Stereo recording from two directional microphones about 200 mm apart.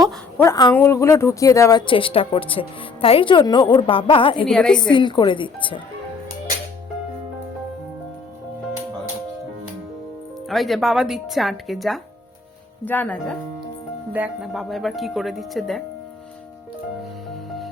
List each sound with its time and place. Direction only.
0.3 s speech: 15° left (ahead or behind)
4.4 s speech: 5° left (ahead or behind)
4.8 s speech: 25° left (ahead or behind)
10.5 s speech: centre (ahead or behind)
14.1 s speech: 5° right (ahead or behind)